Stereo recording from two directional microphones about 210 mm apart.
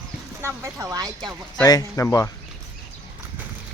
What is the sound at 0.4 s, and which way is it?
Speech, 15° right (ahead or behind).